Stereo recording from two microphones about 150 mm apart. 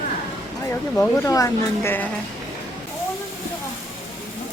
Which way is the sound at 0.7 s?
10° left (ahead or behind).